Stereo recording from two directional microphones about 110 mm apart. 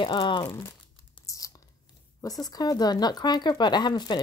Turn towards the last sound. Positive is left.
turn(degrees=40)  # may be behind; listen again after turning